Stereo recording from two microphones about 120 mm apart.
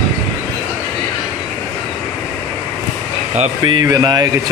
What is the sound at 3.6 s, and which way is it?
Speech, 35° right (ahead or behind).